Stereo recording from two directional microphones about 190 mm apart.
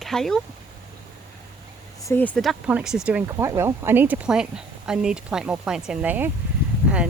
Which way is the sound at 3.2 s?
15° right (ahead or behind).